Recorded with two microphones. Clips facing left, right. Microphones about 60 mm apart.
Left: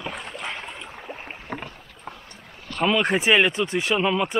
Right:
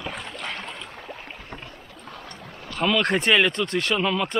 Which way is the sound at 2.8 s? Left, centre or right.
Centre.